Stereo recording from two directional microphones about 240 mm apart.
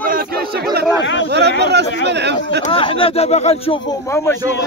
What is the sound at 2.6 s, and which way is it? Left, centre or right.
Speech, left.